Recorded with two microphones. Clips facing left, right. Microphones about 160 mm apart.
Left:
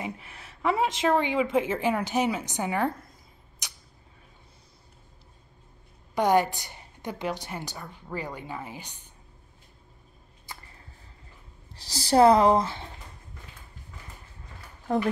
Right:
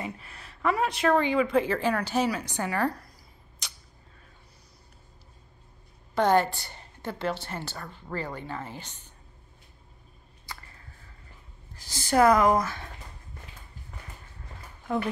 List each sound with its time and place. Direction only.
0.0 s a sound: 15° left (ahead or behind)
1.0 s a woman's voice: 15° left (ahead or behind)
3.6 s arrow: 15° left (ahead or behind)
6.1 s a woman's voice: 15° left (ahead or behind)
11.7 s speech: 35° left (ahead or behind)